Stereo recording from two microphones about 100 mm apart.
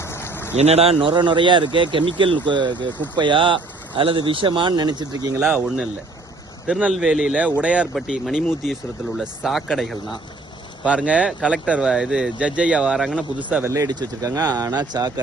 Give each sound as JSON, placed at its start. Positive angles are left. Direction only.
{"t": 0.0, "sound": "a sound", "side_deg": 25}
{"t": 0.6, "sound": "speech", "side_deg": -90}
{"t": 0.9, "sound": "speech", "side_deg": -55}
{"t": 5.5, "sound": "speech", "side_deg": -15}
{"t": 10.8, "sound": "speech", "side_deg": -10}
{"t": 13.7, "sound": "speech", "side_deg": -40}